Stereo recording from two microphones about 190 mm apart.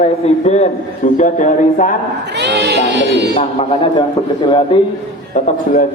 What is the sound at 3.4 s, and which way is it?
Speech, 25° left (ahead or behind).